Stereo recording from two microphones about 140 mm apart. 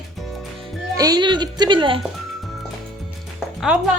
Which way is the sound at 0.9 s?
25° right (ahead or behind).